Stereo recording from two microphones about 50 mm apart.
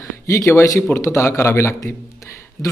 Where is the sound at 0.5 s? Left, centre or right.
Left.